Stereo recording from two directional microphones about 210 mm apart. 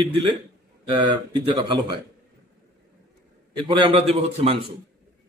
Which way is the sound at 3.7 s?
25° right (ahead or behind).